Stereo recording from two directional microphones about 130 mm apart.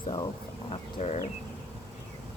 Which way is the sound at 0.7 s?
50° left (ahead or behind).